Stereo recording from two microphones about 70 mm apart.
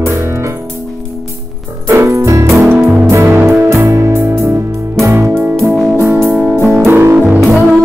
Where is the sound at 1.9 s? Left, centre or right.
Right.